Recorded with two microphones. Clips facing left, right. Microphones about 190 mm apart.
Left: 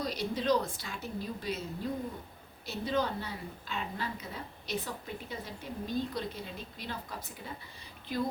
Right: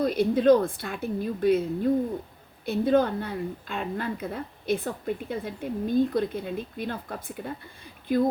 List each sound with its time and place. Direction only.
0.0 s a woman's voice: 55° right (ahead or behind)